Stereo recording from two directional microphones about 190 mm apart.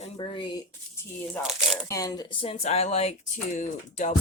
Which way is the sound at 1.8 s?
15° left (ahead or behind).